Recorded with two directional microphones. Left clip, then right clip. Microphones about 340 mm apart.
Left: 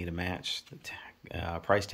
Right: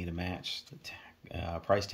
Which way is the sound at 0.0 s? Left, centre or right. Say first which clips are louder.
Left 3 dB; centre.